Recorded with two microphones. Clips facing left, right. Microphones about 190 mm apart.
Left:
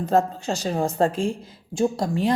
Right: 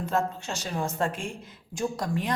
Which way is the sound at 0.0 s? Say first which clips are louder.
Left 7 dB; 35° left (ahead or behind).